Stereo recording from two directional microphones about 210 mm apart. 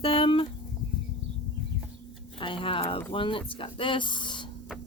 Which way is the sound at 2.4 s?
25° left (ahead or behind).